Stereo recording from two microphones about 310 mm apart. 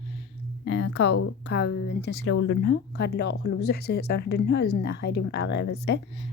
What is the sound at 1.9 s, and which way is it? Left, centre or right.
Speech, left.